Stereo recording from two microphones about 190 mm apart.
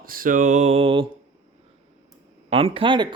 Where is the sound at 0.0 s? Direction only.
50° right (ahead or behind); by 1.0 s 30° right (ahead or behind).